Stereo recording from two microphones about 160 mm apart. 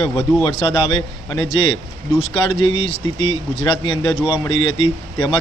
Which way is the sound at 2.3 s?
30° left (ahead or behind).